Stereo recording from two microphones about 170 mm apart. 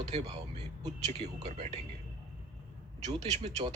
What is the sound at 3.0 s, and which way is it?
Speech, 40° right (ahead or behind).